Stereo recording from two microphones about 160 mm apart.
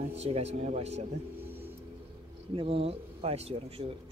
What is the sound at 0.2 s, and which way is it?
Speech, 40° right (ahead or behind).